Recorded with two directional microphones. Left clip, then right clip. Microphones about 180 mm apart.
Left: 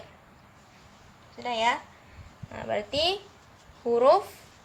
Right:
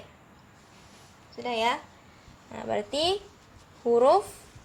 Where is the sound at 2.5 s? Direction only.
30° right (ahead or behind).